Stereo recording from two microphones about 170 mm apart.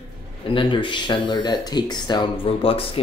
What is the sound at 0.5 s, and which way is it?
Speech, 30° left (ahead or behind).